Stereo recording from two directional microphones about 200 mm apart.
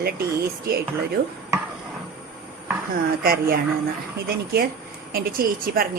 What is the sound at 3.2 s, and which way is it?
Speech, 45° right (ahead or behind).